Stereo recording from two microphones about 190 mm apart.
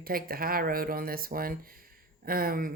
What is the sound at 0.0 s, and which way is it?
Speech, 50° right (ahead or behind).